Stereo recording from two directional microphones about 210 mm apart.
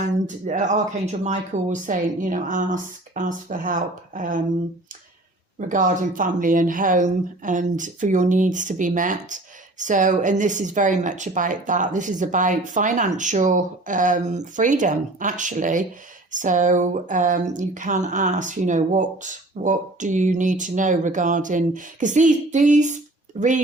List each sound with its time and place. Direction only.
0.0 s speech: 35° right (ahead or behind)
5.5 s speech: 40° right (ahead or behind)